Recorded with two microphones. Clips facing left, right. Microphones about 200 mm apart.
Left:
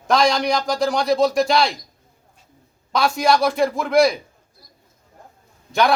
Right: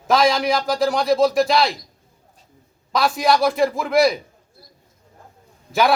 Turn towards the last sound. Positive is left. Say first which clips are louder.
# even
turn(degrees=-5)  # may be behind; listen again after turning